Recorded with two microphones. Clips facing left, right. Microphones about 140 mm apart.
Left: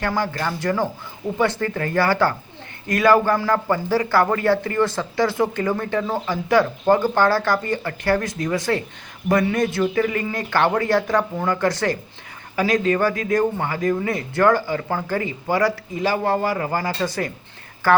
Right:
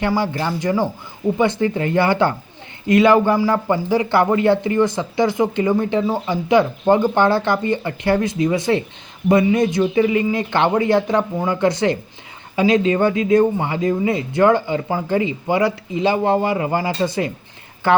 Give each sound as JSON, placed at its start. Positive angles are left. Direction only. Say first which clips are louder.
{"t": 0.1, "sound": "speech", "louder": "right 3 dB", "side_deg": -20}